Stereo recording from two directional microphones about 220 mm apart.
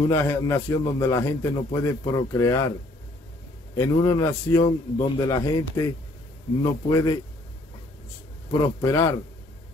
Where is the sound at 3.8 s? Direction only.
15° left (ahead or behind).